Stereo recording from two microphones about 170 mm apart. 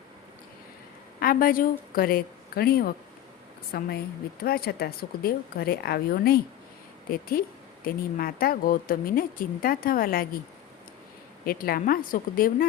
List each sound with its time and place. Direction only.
1.2 s a woman's voice: 55° left (ahead or behind)
11.4 s speech: 60° left (ahead or behind)